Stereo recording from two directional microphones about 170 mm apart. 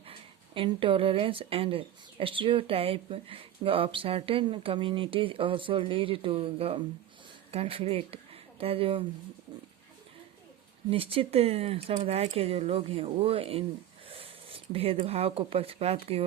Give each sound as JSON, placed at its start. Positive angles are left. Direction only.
{"t": 0.0, "sound": "speech", "side_deg": -30}
{"t": 10.8, "sound": "speech", "side_deg": -35}